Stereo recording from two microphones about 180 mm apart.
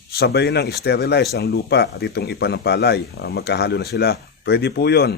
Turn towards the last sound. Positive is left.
turn(degrees=65)  # may be behind; listen again after turning